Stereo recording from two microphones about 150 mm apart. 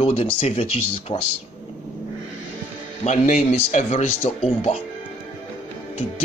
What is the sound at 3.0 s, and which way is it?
Speech, 55° left (ahead or behind).